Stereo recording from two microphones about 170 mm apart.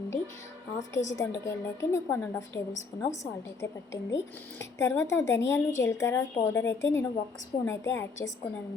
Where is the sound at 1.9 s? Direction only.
15° left (ahead or behind).